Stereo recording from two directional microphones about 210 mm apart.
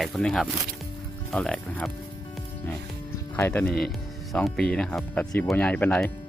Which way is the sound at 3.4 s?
10° left (ahead or behind).